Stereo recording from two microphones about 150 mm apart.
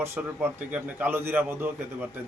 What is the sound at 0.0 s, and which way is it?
A man's voice, 15° right (ahead or behind).